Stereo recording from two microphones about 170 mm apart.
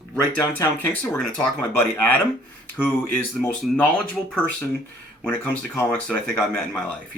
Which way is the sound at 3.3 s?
5° left (ahead or behind).